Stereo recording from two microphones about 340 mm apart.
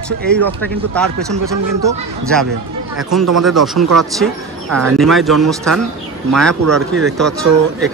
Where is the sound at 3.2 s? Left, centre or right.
Right.